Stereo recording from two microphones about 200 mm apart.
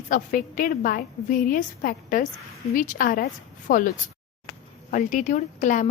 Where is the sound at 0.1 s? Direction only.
45° left (ahead or behind).